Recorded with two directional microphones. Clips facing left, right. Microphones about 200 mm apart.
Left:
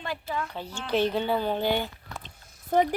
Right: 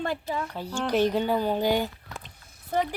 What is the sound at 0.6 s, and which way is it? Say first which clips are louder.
Speech: right 3 dB; 10° right (ahead or behind).